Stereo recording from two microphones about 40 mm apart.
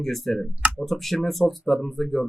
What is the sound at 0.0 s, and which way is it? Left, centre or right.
Speech, centre.